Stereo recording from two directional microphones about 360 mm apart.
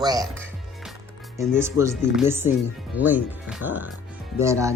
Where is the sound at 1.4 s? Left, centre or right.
Centre.